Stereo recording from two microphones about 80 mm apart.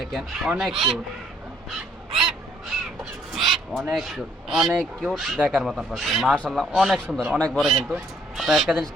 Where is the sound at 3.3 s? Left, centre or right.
Centre.